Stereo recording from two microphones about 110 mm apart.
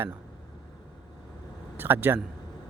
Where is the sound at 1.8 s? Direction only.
20° right (ahead or behind).